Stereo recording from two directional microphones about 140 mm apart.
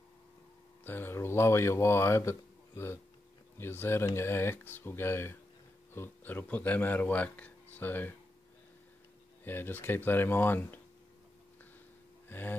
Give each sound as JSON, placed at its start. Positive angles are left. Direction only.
{"t": 0.8, "sound": "speech", "side_deg": 15}
{"t": 9.4, "sound": "speech", "side_deg": 15}
{"t": 12.3, "sound": "gasp", "side_deg": 15}